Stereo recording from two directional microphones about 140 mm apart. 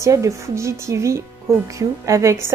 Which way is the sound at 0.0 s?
20° right (ahead or behind).